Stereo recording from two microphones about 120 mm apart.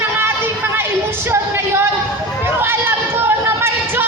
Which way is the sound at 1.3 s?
20° right (ahead or behind).